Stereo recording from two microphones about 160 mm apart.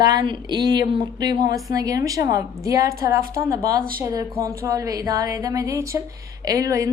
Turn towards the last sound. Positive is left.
turn(degrees=-20)  # may be behind; listen again after turning